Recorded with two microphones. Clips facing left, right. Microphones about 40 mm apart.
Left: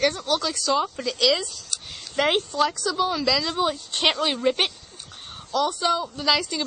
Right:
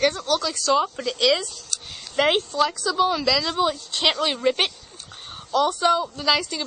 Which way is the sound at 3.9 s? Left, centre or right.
Centre.